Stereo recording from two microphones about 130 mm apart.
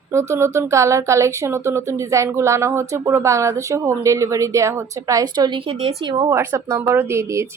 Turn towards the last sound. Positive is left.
turn(degrees=-20)  # may be behind; listen again after turning